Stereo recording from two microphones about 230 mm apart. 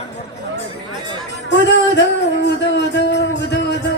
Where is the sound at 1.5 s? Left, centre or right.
Left.